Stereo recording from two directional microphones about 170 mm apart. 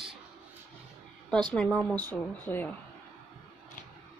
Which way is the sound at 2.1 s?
10° left (ahead or behind).